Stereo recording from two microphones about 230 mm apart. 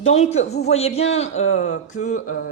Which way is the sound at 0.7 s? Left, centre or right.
Left.